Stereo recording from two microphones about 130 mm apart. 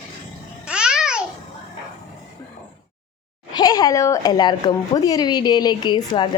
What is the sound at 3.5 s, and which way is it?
Speech, 30° left (ahead or behind).